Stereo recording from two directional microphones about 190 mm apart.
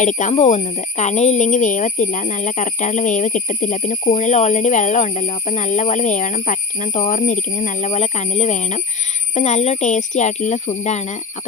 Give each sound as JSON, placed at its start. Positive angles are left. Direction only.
{"t": 0.0, "sound": "speech", "side_deg": 40}